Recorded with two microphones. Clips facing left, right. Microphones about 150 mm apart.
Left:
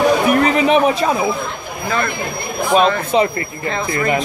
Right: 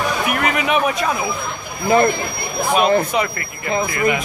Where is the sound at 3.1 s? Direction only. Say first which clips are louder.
Left 5 dB; 30° left (ahead or behind).